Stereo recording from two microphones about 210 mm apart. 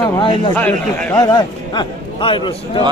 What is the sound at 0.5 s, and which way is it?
Speech, 10° left (ahead or behind).